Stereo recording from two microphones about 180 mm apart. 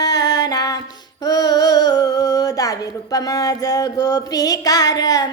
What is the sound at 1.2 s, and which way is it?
Female singing, 20° left (ahead or behind).